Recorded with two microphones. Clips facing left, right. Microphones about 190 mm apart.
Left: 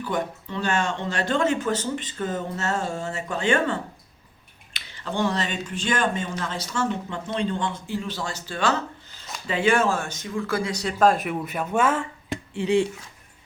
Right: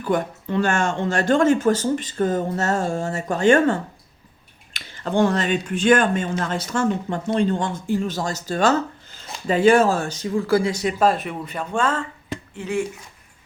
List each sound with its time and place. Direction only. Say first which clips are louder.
0.0 s speech: right 5 dB; 50° right (ahead or behind); by 10.9 s 25° right (ahead or behind)
11.0 s speech: left 1 dB; centre (ahead or behind)